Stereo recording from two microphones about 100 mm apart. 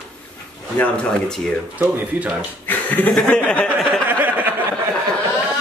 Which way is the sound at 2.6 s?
20° left (ahead or behind).